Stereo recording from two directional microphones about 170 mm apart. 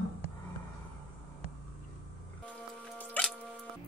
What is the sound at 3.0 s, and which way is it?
Music, 5° left (ahead or behind).